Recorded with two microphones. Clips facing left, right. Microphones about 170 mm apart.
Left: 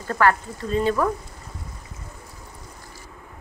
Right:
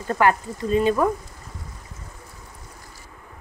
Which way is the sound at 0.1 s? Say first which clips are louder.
Right 1 dB; 20° right (ahead or behind).